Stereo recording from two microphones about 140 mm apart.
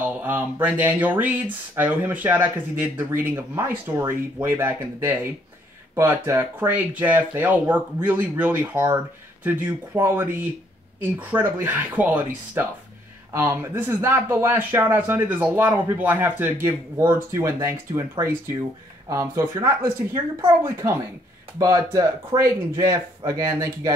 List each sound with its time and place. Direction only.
0.0 s speech: 10° right (ahead or behind)